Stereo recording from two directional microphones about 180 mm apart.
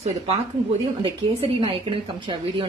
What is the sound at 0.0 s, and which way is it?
A woman's voice, 35° right (ahead or behind).